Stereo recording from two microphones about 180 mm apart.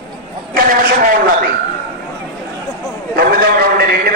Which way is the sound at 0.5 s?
55° right (ahead or behind).